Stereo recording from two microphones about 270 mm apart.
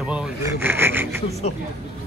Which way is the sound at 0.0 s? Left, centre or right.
Centre.